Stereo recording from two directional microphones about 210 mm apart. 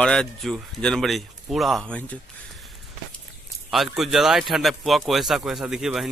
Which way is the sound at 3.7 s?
Centre (ahead or behind).